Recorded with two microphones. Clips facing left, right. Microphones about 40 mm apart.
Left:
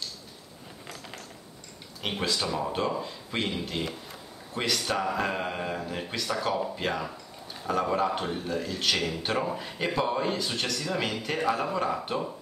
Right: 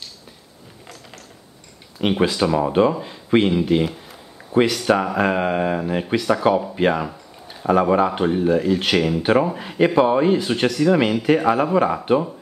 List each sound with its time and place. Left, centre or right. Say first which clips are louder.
2.0 s speech: right 11 dB; right